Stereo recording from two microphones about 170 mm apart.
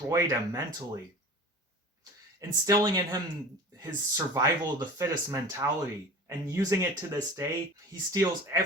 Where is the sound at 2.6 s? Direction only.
20° right (ahead or behind).